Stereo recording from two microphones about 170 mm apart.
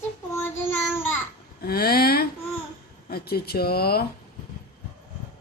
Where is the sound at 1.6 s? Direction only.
65° left (ahead or behind).